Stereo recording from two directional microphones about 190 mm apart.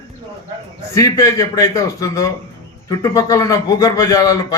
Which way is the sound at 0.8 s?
15° left (ahead or behind).